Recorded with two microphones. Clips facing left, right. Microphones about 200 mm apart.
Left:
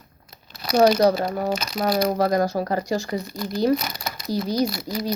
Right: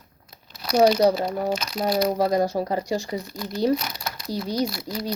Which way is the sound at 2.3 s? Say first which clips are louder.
Left 1 dB; 30° right (ahead or behind).